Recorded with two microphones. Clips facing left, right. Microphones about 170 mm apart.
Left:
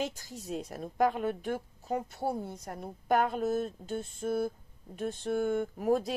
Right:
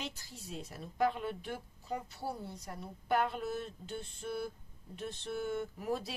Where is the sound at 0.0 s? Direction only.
45° left (ahead or behind).